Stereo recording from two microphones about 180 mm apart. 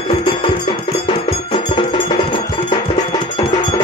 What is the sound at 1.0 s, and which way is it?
Music, 30° left (ahead or behind).